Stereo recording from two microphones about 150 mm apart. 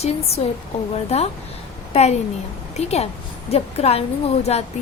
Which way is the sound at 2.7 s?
45° left (ahead or behind).